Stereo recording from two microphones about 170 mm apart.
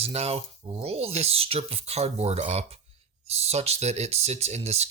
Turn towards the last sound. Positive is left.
turn(degrees=-40)  # may be behind; listen again after turning